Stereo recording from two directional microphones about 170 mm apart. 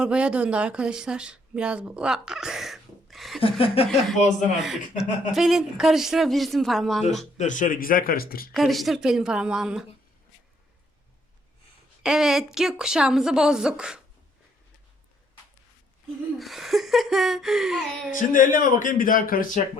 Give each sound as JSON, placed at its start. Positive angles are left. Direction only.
{"t": 0.0, "sound": "speech", "side_deg": -5}
{"t": 3.4, "sound": "speech", "side_deg": 30}
{"t": 4.6, "sound": "speech", "side_deg": 0}
{"t": 7.3, "sound": "a man's voice", "side_deg": 45}
{"t": 8.5, "sound": "speech", "side_deg": 0}
{"t": 12.0, "sound": "speech", "side_deg": -5}
{"t": 16.4, "sound": "speech", "side_deg": 0}
{"t": 18.1, "sound": "speech", "side_deg": 50}